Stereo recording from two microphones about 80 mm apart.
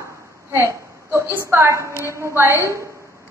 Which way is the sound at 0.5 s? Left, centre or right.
Right.